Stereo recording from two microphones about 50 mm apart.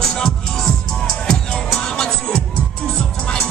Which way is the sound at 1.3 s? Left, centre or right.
Centre.